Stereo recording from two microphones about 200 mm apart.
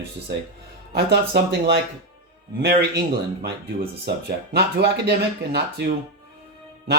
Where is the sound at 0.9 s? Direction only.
55° right (ahead or behind).